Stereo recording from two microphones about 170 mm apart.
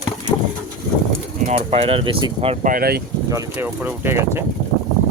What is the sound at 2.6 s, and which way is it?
Speech, 60° right (ahead or behind).